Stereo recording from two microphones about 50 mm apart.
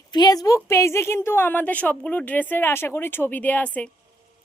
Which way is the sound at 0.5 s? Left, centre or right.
Left.